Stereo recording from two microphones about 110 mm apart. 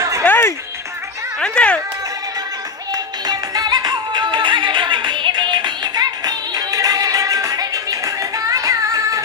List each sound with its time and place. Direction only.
0.2 s music: 20° left (ahead or behind)
1.4 s a sound: 10° left (ahead or behind)
3.3 s music: 35° right (ahead or behind)